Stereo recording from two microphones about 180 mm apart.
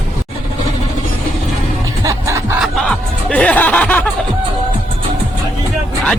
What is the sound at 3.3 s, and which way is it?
Music, 10° left (ahead or behind).